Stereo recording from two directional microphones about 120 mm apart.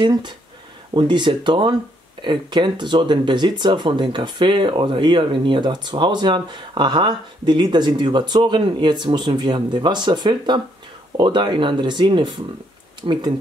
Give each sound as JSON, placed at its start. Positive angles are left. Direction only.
{"t": 0.0, "sound": "speech", "side_deg": -40}